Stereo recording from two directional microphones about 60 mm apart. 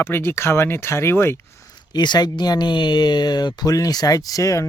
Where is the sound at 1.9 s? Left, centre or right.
Left.